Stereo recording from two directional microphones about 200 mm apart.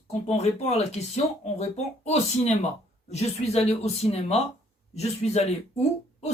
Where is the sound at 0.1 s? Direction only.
35° left (ahead or behind).